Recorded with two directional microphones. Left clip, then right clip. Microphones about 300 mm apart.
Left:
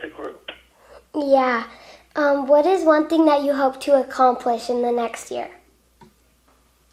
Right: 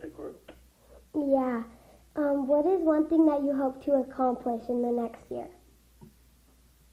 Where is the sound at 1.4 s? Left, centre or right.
Centre.